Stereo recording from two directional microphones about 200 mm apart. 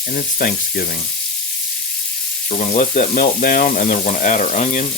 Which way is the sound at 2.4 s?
40° left (ahead or behind).